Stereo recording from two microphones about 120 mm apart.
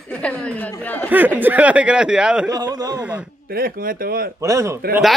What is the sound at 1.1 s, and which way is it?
Speech, 15° right (ahead or behind).